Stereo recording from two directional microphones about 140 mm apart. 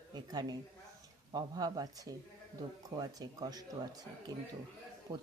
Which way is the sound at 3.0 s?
30° right (ahead or behind).